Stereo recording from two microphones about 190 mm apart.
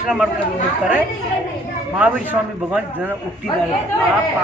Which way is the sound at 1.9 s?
10° right (ahead or behind).